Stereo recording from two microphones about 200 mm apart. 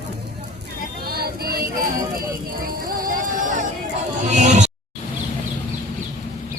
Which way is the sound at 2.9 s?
45° right (ahead or behind).